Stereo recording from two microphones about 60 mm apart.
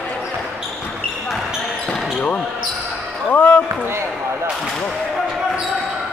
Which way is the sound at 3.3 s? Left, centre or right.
Left.